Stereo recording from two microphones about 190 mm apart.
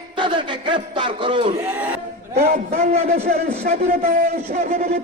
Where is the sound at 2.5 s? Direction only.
35° right (ahead or behind).